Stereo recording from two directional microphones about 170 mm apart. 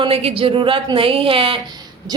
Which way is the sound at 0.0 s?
35° right (ahead or behind).